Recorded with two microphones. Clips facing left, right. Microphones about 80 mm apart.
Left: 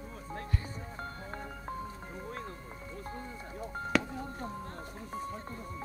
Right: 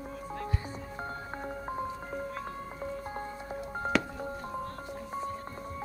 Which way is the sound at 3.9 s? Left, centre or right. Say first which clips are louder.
Even; centre.